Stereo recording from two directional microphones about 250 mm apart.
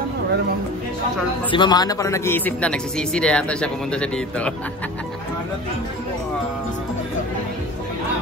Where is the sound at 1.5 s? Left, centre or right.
Centre.